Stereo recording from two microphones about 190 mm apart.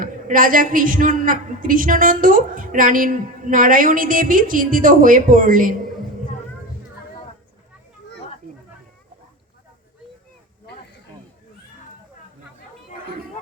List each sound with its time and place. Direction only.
0.0 s a woman's voice: 45° right (ahead or behind)